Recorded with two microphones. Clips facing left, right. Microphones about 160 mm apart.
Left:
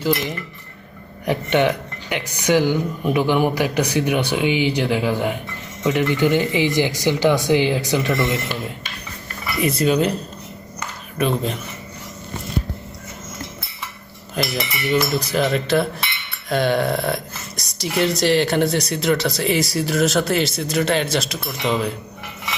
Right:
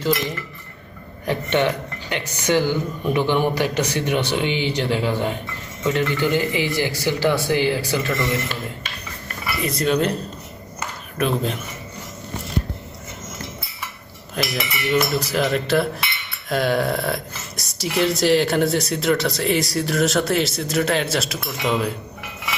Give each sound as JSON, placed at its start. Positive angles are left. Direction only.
{"t": 1.2, "sound": "speech", "side_deg": 15}
{"t": 9.7, "sound": "speech", "side_deg": 5}
{"t": 10.8, "sound": "a sound", "side_deg": 0}
{"t": 14.3, "sound": "speech", "side_deg": 0}